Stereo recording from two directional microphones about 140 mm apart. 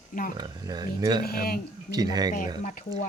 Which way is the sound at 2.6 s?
60° left (ahead or behind).